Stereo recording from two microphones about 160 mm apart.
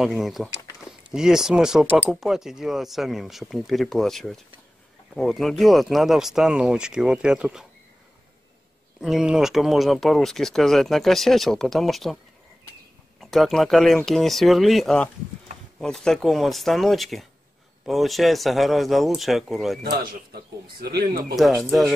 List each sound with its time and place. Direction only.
0.0 s speech: centre (ahead or behind)
9.0 s speech: 5° right (ahead or behind)
13.2 s speech: centre (ahead or behind)
20.1 s speech: 75° right (ahead or behind)
21.4 s speech: centre (ahead or behind)